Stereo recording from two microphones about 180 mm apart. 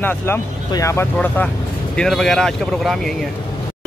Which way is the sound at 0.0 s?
10° left (ahead or behind).